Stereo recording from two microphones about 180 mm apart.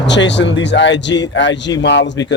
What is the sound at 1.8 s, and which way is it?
Speech, 75° left (ahead or behind).